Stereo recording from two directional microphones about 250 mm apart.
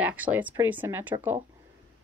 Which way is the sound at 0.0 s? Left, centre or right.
Centre.